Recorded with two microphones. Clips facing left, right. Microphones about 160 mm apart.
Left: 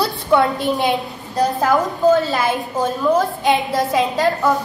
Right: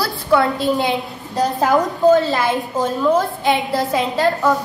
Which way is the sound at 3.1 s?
15° left (ahead or behind).